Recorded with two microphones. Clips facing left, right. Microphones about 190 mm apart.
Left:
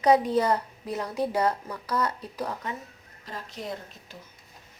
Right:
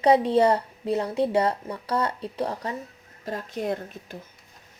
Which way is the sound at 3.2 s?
55° right (ahead or behind).